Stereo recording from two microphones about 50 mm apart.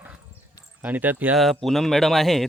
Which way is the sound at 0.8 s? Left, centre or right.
Right.